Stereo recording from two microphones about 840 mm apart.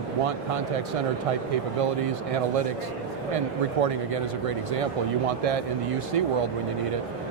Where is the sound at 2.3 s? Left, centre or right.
Right.